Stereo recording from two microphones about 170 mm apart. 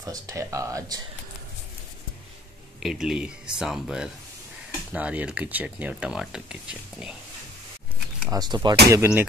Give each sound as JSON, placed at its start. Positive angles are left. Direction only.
{"t": 0.0, "sound": "speech", "side_deg": -20}
{"t": 2.8, "sound": "speech", "side_deg": -5}
{"t": 8.3, "sound": "speech", "side_deg": -25}
{"t": 8.9, "sound": "speech", "side_deg": -15}